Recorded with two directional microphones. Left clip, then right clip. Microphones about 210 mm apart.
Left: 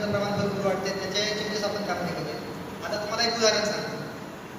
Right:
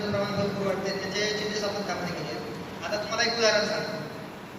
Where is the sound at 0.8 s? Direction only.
40° left (ahead or behind).